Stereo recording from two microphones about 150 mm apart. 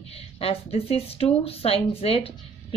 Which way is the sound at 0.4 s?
40° left (ahead or behind).